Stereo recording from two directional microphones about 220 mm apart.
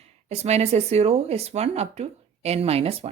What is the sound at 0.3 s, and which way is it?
Speech, 30° right (ahead or behind).